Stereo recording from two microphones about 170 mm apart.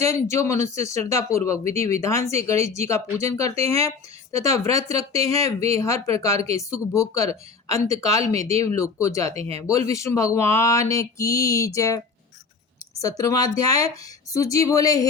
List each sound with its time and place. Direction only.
0.0 s speech: 15° left (ahead or behind)
9.3 s speech: 35° right (ahead or behind)
9.6 s speech: 20° left (ahead or behind)
13.0 s speech: 20° left (ahead or behind)